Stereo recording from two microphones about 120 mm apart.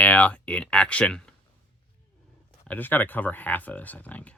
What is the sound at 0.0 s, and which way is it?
Speech, 10° left (ahead or behind).